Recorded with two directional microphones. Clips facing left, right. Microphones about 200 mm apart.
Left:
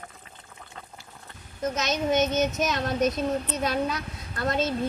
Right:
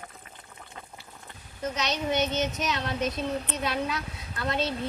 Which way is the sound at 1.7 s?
45° left (ahead or behind).